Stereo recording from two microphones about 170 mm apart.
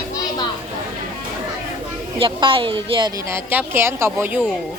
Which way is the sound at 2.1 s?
30° right (ahead or behind).